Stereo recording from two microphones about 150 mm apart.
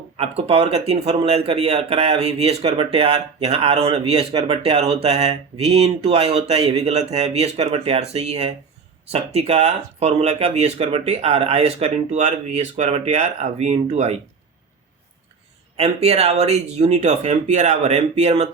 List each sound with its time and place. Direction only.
0.2 s speech: 40° right (ahead or behind)
15.8 s speech: 45° right (ahead or behind)